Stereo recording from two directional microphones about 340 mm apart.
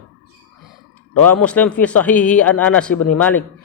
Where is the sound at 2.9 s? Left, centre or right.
Left.